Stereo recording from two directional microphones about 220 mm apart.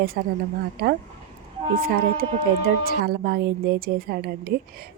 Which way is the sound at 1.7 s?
40° right (ahead or behind).